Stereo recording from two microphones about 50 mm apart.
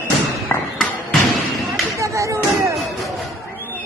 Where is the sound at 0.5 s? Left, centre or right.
Left.